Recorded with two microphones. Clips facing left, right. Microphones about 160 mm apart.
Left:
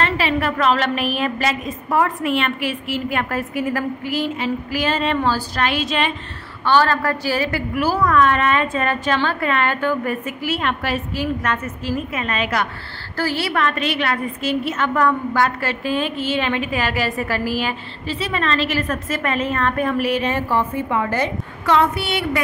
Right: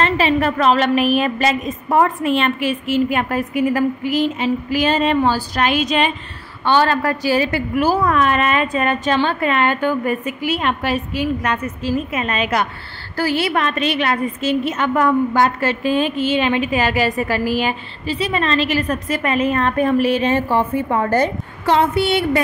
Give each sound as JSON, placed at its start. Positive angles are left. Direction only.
{"t": 0.0, "sound": "a woman's voice", "side_deg": -25}
{"t": 20.9, "sound": "a woman's voice", "side_deg": -40}